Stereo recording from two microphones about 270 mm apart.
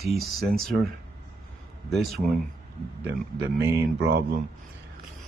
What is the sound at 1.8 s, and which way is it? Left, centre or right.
Speech, centre.